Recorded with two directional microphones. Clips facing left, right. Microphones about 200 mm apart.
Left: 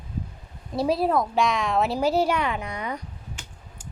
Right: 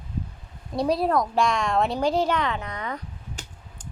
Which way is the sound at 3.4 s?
40° right (ahead or behind).